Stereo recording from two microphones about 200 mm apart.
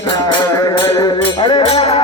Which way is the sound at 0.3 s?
20° left (ahead or behind).